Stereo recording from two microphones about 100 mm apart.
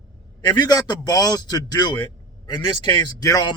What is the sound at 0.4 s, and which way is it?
A man's voice, 45° left (ahead or behind).